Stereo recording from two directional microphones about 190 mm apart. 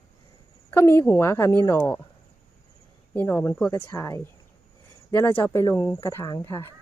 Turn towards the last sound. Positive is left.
turn(degrees=15)  # may be behind; listen again after turning